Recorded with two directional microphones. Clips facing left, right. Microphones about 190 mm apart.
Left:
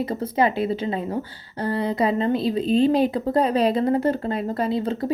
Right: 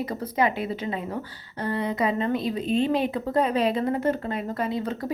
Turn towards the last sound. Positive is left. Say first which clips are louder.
# left 4 dB
turn(degrees=30)  # may be behind; listen again after turning